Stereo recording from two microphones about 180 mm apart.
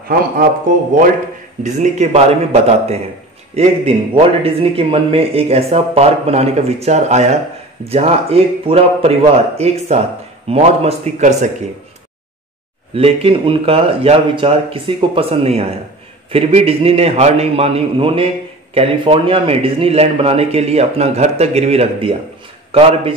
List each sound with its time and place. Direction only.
0.9 s a man's voice: 45° right (ahead or behind)
12.9 s a man's voice: 30° right (ahead or behind)